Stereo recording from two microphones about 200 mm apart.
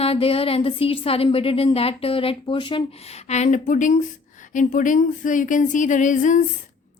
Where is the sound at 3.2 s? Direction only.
35° left (ahead or behind).